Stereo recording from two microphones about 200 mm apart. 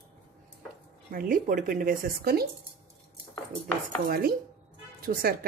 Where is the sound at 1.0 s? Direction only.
45° right (ahead or behind).